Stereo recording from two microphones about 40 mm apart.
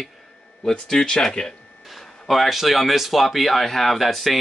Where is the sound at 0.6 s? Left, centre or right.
Centre.